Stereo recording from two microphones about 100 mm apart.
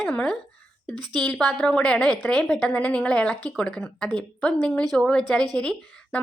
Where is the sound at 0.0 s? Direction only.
10° left (ahead or behind).